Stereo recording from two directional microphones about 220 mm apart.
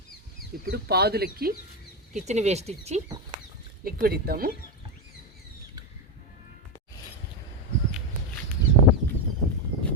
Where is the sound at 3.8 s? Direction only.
45° right (ahead or behind).